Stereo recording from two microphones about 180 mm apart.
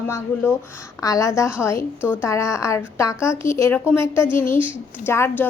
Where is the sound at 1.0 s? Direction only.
20° left (ahead or behind).